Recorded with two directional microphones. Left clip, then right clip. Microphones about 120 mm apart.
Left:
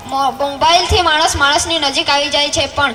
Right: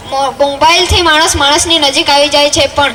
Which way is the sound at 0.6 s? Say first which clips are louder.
Right 2 dB; 25° right (ahead or behind).